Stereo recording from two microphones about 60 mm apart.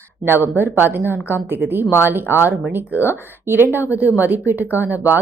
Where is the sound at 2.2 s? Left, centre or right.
Left.